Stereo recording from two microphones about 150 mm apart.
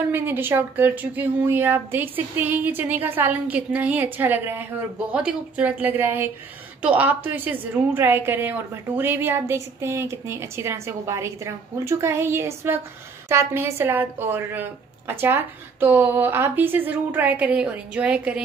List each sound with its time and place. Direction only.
0.1 s a woman's voice: 15° right (ahead or behind)